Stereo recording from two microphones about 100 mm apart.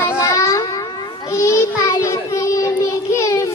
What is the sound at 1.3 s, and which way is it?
Child singing, 30° left (ahead or behind).